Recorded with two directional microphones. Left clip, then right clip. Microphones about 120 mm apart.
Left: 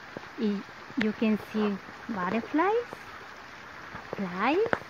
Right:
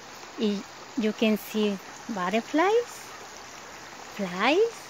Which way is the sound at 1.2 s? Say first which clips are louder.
Right 3 dB; 20° right (ahead or behind).